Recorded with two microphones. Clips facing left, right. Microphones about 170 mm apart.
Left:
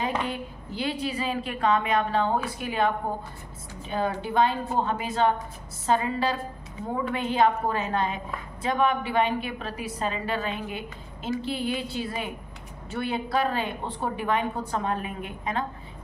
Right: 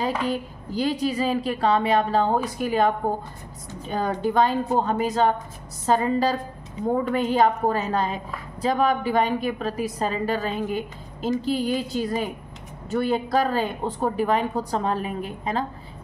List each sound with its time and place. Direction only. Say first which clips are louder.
0.0 s a woman's voice: right 4 dB; 40° right (ahead or behind)
3.9 s a woman's voice: right 3 dB; 40° right (ahead or behind)